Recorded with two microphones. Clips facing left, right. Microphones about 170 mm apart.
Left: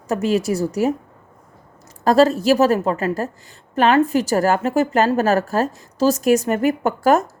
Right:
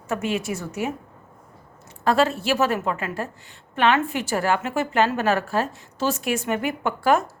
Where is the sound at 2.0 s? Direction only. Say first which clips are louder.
Left 6 dB; 40° left (ahead or behind).